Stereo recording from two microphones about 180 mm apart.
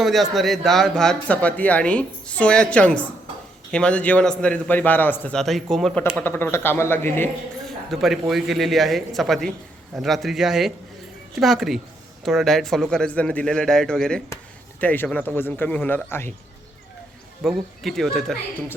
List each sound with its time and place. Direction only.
0.0 s a man's voice: centre (ahead or behind)
7.9 s a man's voice: centre (ahead or behind)
17.4 s a man's voice: centre (ahead or behind)